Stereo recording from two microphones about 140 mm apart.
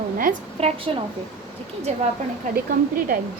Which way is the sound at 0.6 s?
45° right (ahead or behind).